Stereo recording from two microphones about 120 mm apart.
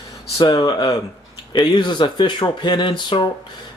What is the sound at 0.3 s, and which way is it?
Speech, 30° left (ahead or behind).